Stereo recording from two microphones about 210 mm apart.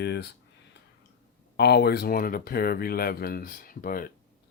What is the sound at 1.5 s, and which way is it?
Speech, 50° left (ahead or behind).